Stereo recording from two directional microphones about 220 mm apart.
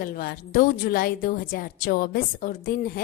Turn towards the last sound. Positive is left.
turn(degrees=40)  # may be behind; listen again after turning